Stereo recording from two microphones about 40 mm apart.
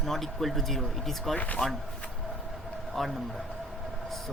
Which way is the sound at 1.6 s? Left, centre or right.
Centre.